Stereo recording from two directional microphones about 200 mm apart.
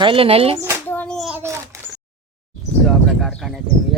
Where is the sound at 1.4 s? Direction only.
15° right (ahead or behind).